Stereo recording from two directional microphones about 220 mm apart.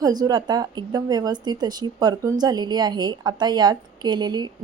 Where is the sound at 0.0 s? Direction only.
20° right (ahead or behind).